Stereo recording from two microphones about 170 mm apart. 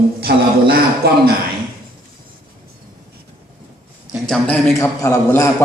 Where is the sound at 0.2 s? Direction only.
70° right (ahead or behind).